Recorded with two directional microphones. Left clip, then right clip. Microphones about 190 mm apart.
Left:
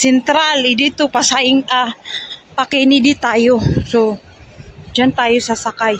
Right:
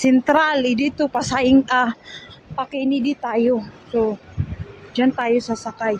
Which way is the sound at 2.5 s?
10° left (ahead or behind).